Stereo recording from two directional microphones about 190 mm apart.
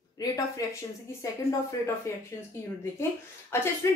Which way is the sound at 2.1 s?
15° left (ahead or behind).